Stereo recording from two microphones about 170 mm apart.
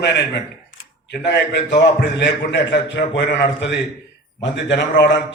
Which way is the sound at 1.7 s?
90° left.